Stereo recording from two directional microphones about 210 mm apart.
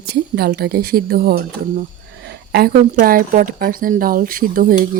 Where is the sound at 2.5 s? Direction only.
45° right (ahead or behind).